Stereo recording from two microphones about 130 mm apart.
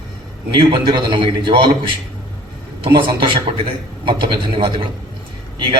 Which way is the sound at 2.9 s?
40° right (ahead or behind).